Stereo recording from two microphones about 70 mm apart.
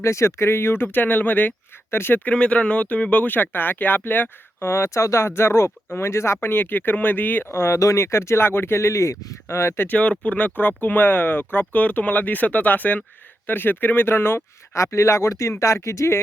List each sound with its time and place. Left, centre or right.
0.0 s speech: left
2.3 s speech: centre
4.7 s speech: left
9.8 s speech: left
14.7 s speech: left